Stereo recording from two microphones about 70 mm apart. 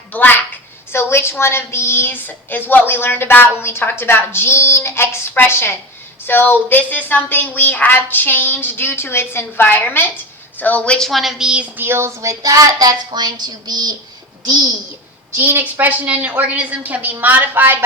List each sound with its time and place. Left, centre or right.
0.1 s a sound: left
0.9 s a woman's voice: left; by 11.1 s centre
11.1 s a woman's voice: centre
11.6 s a woman's voice: right
15.4 s a woman's voice: right